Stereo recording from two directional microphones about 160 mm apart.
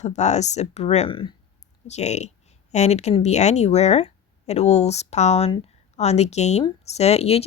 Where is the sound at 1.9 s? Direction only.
45° left (ahead or behind).